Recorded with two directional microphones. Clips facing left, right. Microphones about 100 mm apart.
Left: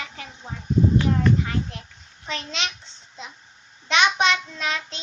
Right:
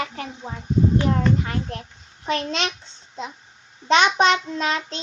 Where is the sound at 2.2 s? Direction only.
50° right (ahead or behind).